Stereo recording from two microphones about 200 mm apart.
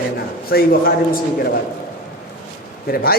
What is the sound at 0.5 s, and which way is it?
Speech, 50° left (ahead or behind).